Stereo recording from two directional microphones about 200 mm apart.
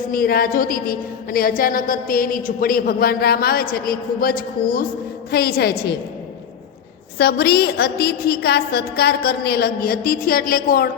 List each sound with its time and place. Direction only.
0.1 s a woman's voice: 45° left (ahead or behind)
7.2 s a woman's voice: 50° left (ahead or behind)